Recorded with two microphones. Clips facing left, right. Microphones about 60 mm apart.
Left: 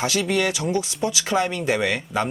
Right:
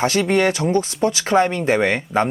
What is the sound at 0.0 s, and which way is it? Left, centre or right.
Speech, right.